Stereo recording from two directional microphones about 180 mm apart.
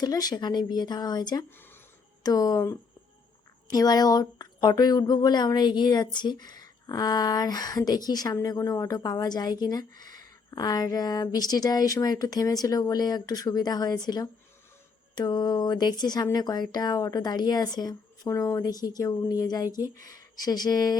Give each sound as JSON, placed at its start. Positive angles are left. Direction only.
{"t": 0.0, "sound": "speech", "side_deg": 20}